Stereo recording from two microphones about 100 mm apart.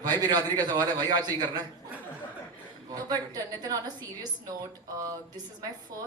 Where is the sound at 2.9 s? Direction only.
40° right (ahead or behind).